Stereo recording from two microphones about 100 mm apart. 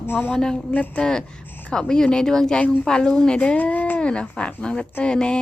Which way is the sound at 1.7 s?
5° left (ahead or behind).